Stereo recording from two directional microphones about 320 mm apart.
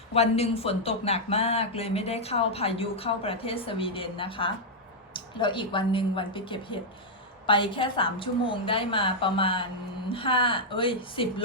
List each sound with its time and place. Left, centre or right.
0.1 s speech: centre